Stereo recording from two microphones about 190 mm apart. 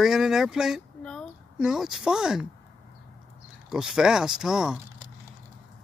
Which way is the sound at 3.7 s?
5° right (ahead or behind).